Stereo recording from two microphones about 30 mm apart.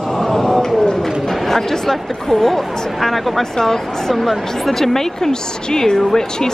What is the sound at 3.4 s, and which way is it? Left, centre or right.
Speech, centre.